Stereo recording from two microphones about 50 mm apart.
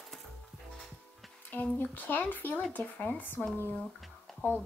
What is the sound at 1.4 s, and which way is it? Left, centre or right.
A woman's voice, left.